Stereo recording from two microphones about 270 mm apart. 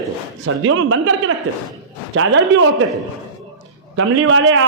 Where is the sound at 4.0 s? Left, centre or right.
Right.